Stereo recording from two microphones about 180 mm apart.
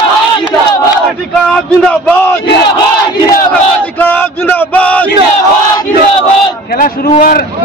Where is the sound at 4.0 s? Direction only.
10° left (ahead or behind).